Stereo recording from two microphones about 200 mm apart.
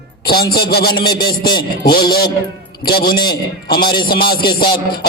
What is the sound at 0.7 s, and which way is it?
Music, 50° left (ahead or behind).